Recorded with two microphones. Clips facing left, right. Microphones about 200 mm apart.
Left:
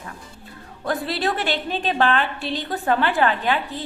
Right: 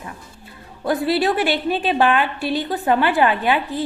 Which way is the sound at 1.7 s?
15° right (ahead or behind).